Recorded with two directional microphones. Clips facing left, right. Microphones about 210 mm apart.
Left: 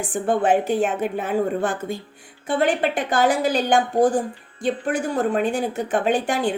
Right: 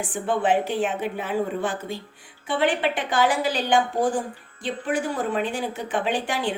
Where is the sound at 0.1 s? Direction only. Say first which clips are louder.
Left 3 dB; 45° left (ahead or behind).